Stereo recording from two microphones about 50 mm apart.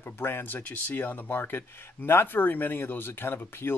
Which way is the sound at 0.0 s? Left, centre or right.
Left.